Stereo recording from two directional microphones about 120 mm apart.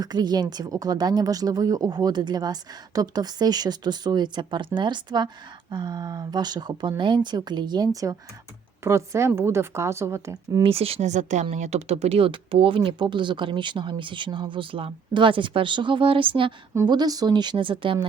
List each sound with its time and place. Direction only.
0.0 s a woman's voice: 35° right (ahead or behind)
8.8 s a woman's voice: 25° right (ahead or behind)
10.6 s speech: 55° right (ahead or behind)
11.1 s speech: 80° right
11.5 s speech: 70° right (ahead or behind); by 16.6 s 45° right (ahead or behind)
16.7 s a woman's voice: 35° right (ahead or behind)